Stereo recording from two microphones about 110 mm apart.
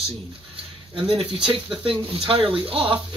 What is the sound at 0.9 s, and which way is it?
Speech, 55° right (ahead or behind).